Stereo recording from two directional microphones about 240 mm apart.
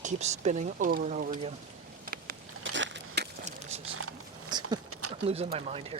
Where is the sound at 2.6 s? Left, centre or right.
Right.